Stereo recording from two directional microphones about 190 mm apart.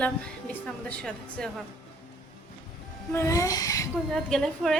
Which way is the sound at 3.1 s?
15° left (ahead or behind).